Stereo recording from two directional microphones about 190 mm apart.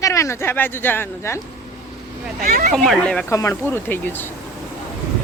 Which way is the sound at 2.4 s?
45° right (ahead or behind).